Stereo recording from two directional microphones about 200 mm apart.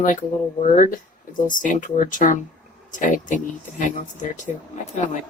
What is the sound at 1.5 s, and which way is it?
Speech, 40° left (ahead or behind).